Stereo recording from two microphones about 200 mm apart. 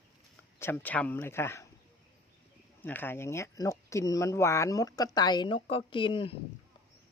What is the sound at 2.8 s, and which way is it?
Speech, 10° left (ahead or behind).